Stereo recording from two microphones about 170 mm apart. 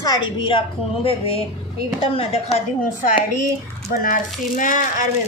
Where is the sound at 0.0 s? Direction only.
25° left (ahead or behind).